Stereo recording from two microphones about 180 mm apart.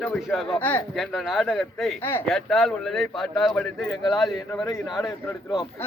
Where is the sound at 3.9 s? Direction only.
25° left (ahead or behind).